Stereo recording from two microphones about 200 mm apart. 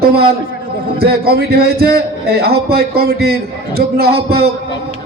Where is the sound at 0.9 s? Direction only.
50° right (ahead or behind).